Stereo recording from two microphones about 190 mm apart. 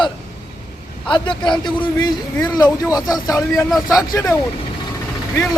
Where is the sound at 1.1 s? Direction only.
25° left (ahead or behind).